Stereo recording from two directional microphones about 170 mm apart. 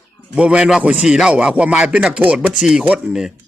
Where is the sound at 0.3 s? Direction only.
5° right (ahead or behind).